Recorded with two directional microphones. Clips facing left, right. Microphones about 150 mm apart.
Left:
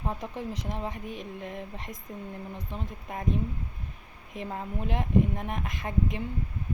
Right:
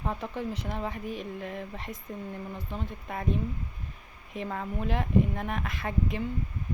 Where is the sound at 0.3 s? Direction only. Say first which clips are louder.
Right 1 dB; 35° left (ahead or behind).